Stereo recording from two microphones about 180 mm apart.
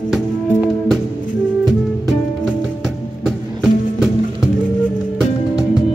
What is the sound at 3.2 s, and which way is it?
Music, centre (ahead or behind).